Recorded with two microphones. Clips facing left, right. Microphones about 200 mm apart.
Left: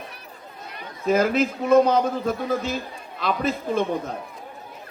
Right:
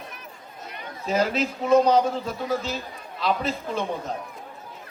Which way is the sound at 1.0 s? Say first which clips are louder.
Left 4 dB; 55° left (ahead or behind).